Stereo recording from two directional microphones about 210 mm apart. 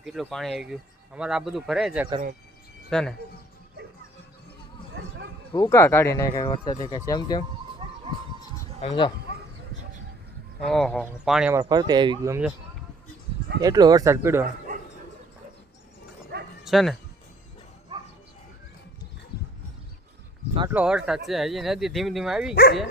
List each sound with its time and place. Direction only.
0.0 s speech: centre (ahead or behind)
5.5 s speech: 15° left (ahead or behind)
7.8 s music: 25° right (ahead or behind)
8.8 s speech: 25° left (ahead or behind)
10.6 s speech: centre (ahead or behind)
11.6 s speech: 20° right (ahead or behind)
13.6 s speech: 20° right (ahead or behind)
16.3 s dog: 50° right (ahead or behind)
16.6 s speech: centre (ahead or behind)
17.9 s a sound: 20° right (ahead or behind)
20.7 s speech: 5° right (ahead or behind)
22.5 s speech: 50° left (ahead or behind)